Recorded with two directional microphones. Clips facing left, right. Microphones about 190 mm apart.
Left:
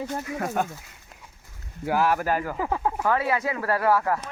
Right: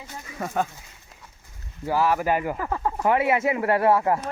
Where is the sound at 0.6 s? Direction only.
5° left (ahead or behind).